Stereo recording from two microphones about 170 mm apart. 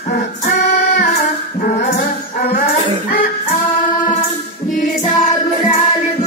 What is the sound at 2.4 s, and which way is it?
Music, 65° left (ahead or behind).